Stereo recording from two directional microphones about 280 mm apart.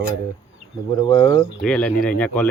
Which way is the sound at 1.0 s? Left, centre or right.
Centre.